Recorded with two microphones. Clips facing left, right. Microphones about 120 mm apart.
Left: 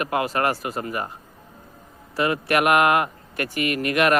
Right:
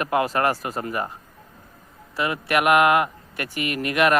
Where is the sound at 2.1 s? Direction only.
30° left (ahead or behind).